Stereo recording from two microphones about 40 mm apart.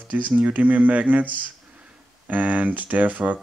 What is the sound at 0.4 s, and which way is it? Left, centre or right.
Speech, right.